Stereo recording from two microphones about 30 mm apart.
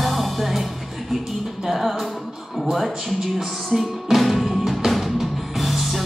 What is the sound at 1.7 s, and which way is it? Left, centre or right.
Music, centre.